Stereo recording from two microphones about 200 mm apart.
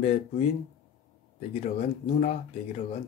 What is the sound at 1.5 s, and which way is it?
Speech, 35° left (ahead or behind).